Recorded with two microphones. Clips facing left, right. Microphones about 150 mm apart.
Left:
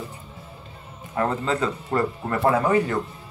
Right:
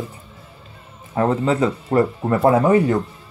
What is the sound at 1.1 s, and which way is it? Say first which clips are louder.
Speech: right 6 dB; 25° right (ahead or behind).